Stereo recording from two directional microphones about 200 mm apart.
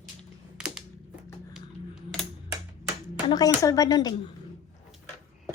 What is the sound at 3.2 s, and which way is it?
Speech, 20° left (ahead or behind).